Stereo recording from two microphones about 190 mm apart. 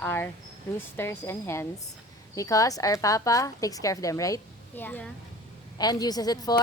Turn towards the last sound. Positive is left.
turn(degrees=20)  # may be behind; listen again after turning